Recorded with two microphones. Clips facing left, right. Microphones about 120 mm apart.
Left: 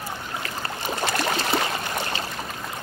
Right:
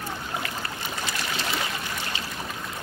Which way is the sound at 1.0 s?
50° left (ahead or behind).